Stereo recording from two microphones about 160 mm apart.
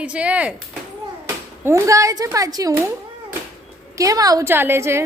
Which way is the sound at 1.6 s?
20° right (ahead or behind).